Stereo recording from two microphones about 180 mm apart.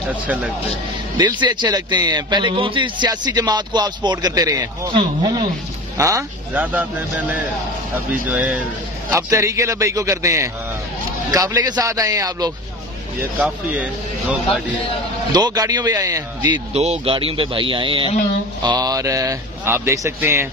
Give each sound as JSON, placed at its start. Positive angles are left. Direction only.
{"t": 0.1, "sound": "a man's voice", "side_deg": -10}
{"t": 1.1, "sound": "a man's voice", "side_deg": -25}
{"t": 13.4, "sound": "a man's voice", "side_deg": -10}
{"t": 15.3, "sound": "a man's voice", "side_deg": -20}
{"t": 16.7, "sound": "a man's voice", "side_deg": -35}